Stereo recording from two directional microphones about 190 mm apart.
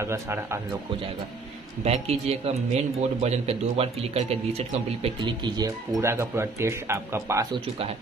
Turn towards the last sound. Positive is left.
turn(degrees=-15)  # may be behind; listen again after turning